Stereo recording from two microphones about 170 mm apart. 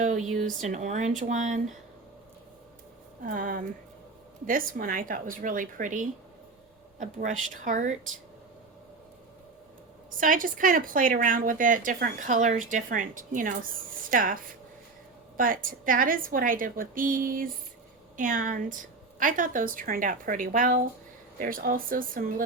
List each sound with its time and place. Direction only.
0.0 s speech: 45° right (ahead or behind)
3.2 s speech: 55° right (ahead or behind)
10.1 s speech: 50° right (ahead or behind)
15.4 s speech: 55° right (ahead or behind)